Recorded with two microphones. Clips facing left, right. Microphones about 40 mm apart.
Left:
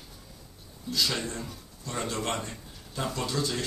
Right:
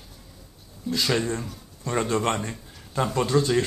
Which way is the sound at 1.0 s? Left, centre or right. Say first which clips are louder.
Right 5 dB; centre.